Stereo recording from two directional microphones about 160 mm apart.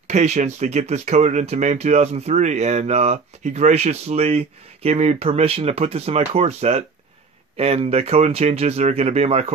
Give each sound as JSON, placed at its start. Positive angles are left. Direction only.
{"t": 0.1, "sound": "speech", "side_deg": -45}